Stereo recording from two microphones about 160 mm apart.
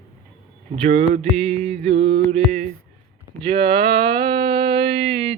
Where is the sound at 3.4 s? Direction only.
35° right (ahead or behind).